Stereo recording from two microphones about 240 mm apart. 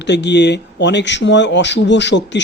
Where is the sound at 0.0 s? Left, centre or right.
Left.